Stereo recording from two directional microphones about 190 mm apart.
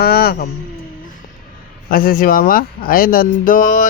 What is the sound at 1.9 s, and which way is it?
Speech, 50° left (ahead or behind).